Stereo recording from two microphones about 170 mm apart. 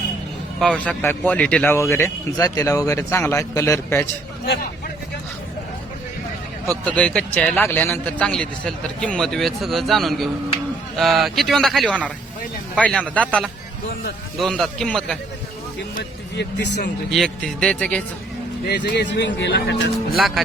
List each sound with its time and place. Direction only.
0.6 s a man's voice: 5° left (ahead or behind)
6.7 s a man's voice: 10° left (ahead or behind)
17.1 s a man's voice: 5° left (ahead or behind)
18.7 s speech: 85° left
20.1 s a man's voice: centre (ahead or behind)